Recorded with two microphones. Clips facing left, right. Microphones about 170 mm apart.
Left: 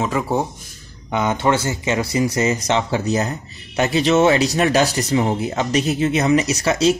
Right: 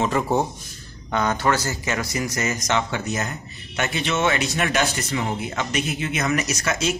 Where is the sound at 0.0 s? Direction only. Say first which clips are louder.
Left 1 dB; 5° left (ahead or behind).